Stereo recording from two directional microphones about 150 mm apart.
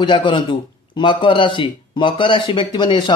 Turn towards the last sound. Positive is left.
turn(degrees=30)  # may be behind; listen again after turning